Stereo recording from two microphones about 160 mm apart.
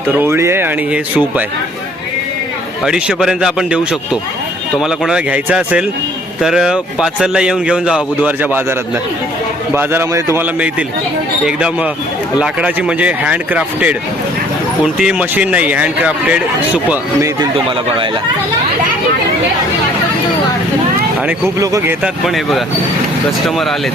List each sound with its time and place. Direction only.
0.2 s a man's voice: 15° right (ahead or behind)
2.8 s a man's voice: 5° right (ahead or behind)
9.7 s a man's voice: 15° right (ahead or behind)
14.9 s a man's voice: 5° right (ahead or behind)
21.6 s speech: 20° right (ahead or behind)
22.0 s a man's voice: centre (ahead or behind)